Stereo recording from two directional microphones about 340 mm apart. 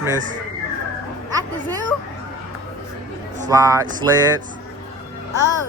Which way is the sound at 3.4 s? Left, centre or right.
Centre.